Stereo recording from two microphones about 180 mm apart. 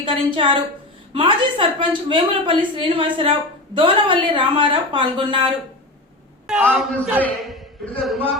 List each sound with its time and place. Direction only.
0.0 s a woman's voice: 30° right (ahead or behind)
6.5 s a man's voice: centre (ahead or behind)